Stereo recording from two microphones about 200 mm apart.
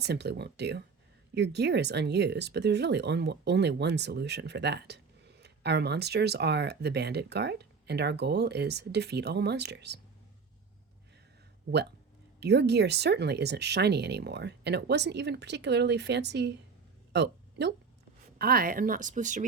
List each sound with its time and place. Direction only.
0.0 s speech: 55° right (ahead or behind)
12.4 s speech: 55° right (ahead or behind)
17.1 s a sound: 60° right (ahead or behind)
18.3 s speech: 50° right (ahead or behind)